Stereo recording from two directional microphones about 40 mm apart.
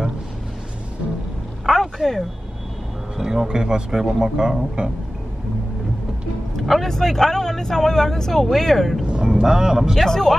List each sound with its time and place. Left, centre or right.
1.7 s a sound: centre
3.2 s speech: centre
6.5 s a sound: centre
6.9 s speech: centre
9.2 s speech: centre
10.0 s speech: centre